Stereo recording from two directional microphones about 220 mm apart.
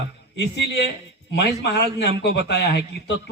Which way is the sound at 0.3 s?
50° left (ahead or behind).